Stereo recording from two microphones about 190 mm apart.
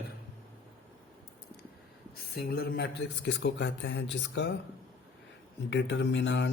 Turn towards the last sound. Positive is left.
turn(degrees=70)  # may be behind; listen again after turning